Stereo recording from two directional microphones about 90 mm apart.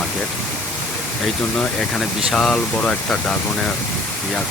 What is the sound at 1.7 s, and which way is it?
Speech, 5° left (ahead or behind).